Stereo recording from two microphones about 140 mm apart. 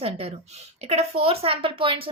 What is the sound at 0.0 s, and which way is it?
Speech, 45° right (ahead or behind).